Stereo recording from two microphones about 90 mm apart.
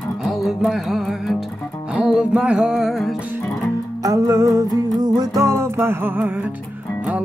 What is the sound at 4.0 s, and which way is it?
Music, 40° right (ahead or behind).